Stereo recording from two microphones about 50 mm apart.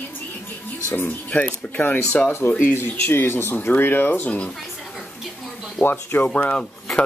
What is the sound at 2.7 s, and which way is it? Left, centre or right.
Speech, left.